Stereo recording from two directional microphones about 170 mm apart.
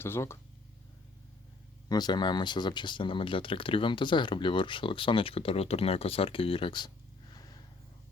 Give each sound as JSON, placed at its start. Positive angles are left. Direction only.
{"t": 0.0, "sound": "speech", "side_deg": 15}
{"t": 1.9, "sound": "speech", "side_deg": 25}